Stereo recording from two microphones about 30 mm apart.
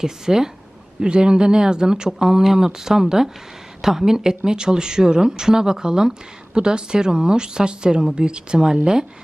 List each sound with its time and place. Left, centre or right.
0.0 s speech: centre
0.9 s speech: right